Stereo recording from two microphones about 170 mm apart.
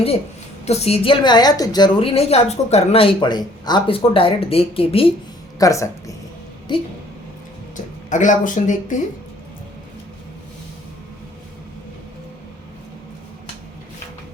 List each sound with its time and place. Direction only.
0.6 s a woman's voice: 40° left (ahead or behind)
5.5 s speech: 20° left (ahead or behind)
6.7 s speech: 30° left (ahead or behind)
8.1 s speech: 50° left (ahead or behind)